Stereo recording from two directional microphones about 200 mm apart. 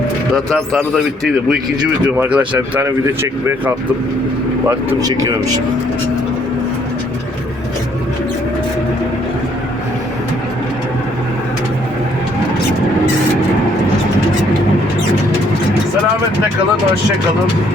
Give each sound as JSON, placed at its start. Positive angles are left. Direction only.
{"t": 0.3, "sound": "speech", "side_deg": 0}
{"t": 4.7, "sound": "speech", "side_deg": -15}